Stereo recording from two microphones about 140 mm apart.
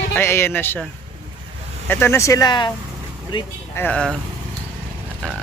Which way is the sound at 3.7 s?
10° left (ahead or behind).